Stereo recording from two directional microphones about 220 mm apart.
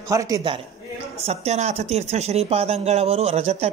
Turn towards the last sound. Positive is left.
turn(degrees=-30)  # may be behind; listen again after turning